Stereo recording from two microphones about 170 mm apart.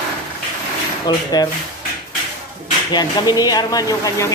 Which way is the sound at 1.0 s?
25° left (ahead or behind).